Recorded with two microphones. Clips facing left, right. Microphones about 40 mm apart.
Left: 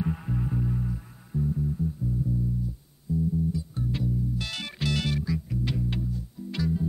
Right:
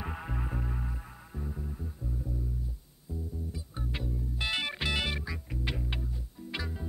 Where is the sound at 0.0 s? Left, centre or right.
Right.